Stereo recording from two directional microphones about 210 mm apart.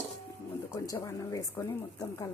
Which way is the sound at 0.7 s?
15° left (ahead or behind).